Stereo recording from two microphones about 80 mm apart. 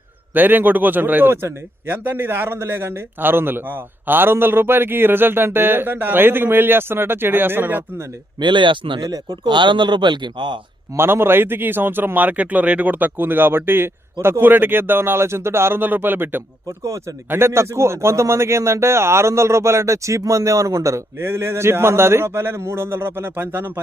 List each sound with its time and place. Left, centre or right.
0.3 s a man's voice: right
8.4 s speech: right
9.0 s speech: right
10.9 s a man's voice: right
16.8 s speech: right
17.2 s speech: right